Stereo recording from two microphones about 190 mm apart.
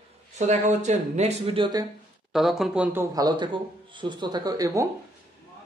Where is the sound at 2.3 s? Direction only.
Centre (ahead or behind); by 4.8 s 20° right (ahead or behind).